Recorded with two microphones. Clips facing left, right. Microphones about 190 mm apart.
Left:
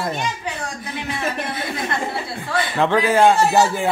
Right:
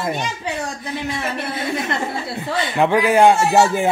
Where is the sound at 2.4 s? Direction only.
20° right (ahead or behind).